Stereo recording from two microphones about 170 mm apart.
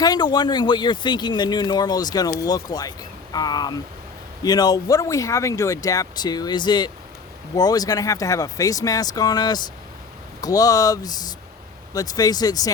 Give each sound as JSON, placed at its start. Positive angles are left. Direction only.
{"t": 0.0, "sound": "speech", "side_deg": 25}